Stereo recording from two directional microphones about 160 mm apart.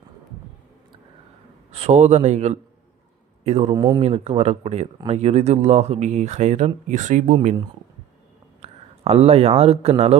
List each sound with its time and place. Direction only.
1.7 s speech: 45° right (ahead or behind)
3.8 s speech: 20° right (ahead or behind)
4.0 s speech: 40° right (ahead or behind)
8.6 s speech: 40° right (ahead or behind)